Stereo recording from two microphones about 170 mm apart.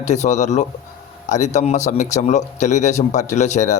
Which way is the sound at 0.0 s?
45° left (ahead or behind).